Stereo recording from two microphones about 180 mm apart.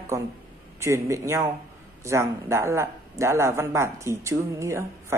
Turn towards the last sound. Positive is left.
turn(degrees=-15)  # may be behind; listen again after turning